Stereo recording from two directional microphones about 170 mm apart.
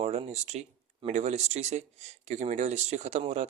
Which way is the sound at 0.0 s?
40° right (ahead or behind).